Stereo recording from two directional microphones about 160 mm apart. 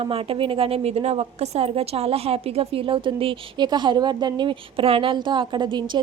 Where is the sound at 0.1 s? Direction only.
35° right (ahead or behind).